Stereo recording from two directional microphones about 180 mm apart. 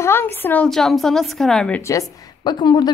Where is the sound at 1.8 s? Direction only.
20° left (ahead or behind).